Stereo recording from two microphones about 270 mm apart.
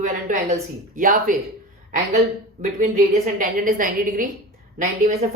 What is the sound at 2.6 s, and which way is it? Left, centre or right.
Speech, right.